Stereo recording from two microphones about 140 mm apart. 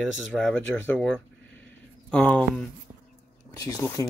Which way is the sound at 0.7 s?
15° left (ahead or behind).